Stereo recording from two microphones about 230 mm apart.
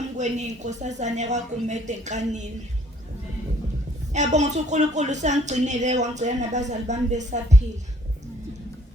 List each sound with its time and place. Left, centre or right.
0.2 s a woman's voice: right
4.1 s a woman's voice: right